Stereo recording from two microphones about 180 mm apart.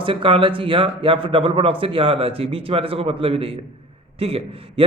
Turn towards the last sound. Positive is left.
turn(degrees=-30)  # may be behind; listen again after turning